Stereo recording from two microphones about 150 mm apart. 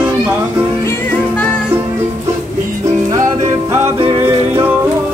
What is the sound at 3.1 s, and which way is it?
Music, 20° right (ahead or behind).